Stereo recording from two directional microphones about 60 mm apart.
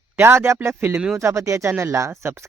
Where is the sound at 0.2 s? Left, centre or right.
Right.